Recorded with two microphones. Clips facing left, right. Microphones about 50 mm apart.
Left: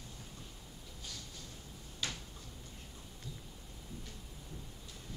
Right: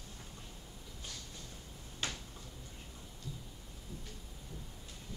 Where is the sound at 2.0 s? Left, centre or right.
Right.